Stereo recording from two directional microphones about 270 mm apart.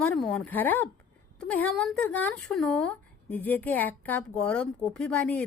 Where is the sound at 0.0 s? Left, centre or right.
Centre.